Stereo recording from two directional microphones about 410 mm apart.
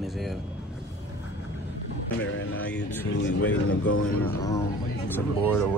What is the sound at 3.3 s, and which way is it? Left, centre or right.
Speech, left.